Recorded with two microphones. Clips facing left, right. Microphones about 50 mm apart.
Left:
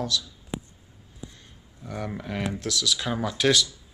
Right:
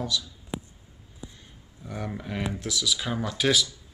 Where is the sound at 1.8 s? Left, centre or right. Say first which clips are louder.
Left 1 dB; centre.